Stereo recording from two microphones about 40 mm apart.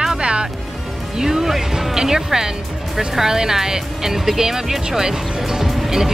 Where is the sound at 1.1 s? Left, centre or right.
Centre.